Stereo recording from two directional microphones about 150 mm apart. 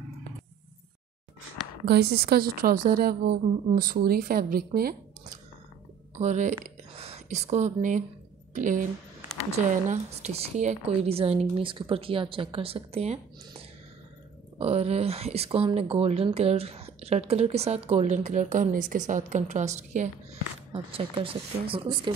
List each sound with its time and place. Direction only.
1.9 s a woman's voice: 90° right
6.1 s a woman's voice: 50° right (ahead or behind)
14.6 s speech: 40° right (ahead or behind)
20.7 s a woman's voice: 35° right (ahead or behind)